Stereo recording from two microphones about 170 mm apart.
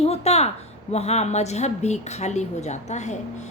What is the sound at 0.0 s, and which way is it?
A woman's voice, 40° left (ahead or behind).